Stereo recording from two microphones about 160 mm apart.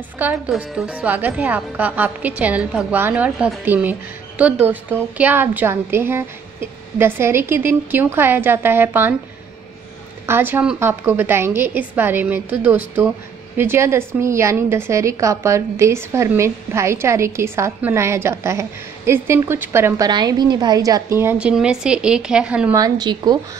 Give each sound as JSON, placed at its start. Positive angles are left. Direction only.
{"t": 0.5, "sound": "a woman's voice", "side_deg": -10}
{"t": 10.2, "sound": "a woman's voice", "side_deg": -15}
{"t": 20.1, "sound": "a woman's voice", "side_deg": -25}
{"t": 22.8, "sound": "a woman's voice", "side_deg": -25}